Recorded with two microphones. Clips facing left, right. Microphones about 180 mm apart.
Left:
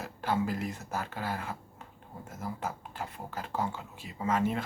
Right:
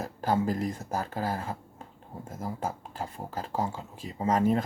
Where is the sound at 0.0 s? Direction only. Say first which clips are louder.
Right 4 dB; 40° right (ahead or behind).